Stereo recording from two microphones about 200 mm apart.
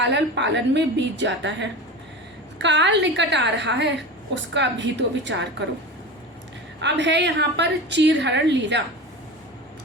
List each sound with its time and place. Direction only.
0.0 s a woman's voice: 60° right (ahead or behind)
6.7 s a woman's voice: 60° right (ahead or behind)